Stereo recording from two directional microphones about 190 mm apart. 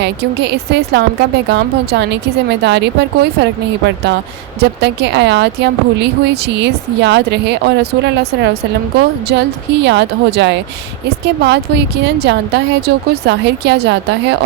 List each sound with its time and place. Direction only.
0.0 s a woman's voice: 60° right (ahead or behind)